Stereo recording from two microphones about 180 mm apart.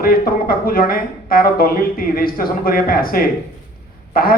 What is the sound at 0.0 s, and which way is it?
Speech, 55° left (ahead or behind).